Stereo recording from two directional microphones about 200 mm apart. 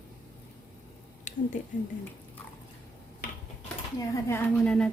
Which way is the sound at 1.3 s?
40° left (ahead or behind).